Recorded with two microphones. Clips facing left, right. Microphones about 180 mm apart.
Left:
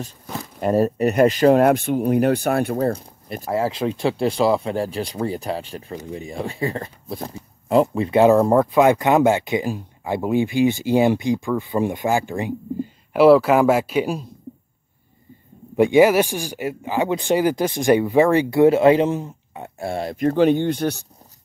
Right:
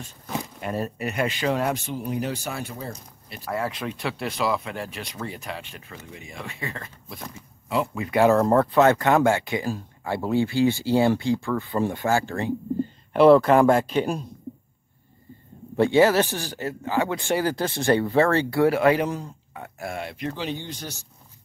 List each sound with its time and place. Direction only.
0.6 s speech: 40° left (ahead or behind)
3.4 s speech: 30° left (ahead or behind)
8.2 s speech: 15° left (ahead or behind)
15.7 s speech: 15° left (ahead or behind); by 21.1 s 60° left (ahead or behind)